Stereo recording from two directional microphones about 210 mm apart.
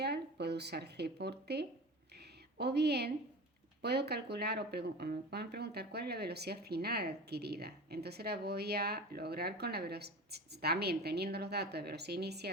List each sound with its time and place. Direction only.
0.0 s speech: 50° right (ahead or behind)